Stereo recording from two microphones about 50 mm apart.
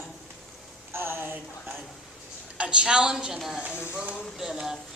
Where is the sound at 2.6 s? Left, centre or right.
Centre.